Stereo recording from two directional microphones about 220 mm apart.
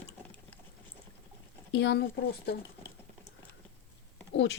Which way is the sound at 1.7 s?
50° left (ahead or behind).